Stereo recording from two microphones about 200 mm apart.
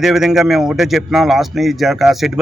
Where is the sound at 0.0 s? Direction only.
Centre (ahead or behind).